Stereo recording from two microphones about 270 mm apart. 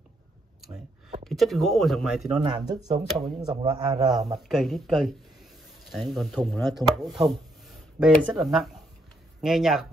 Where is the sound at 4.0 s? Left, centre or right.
Centre.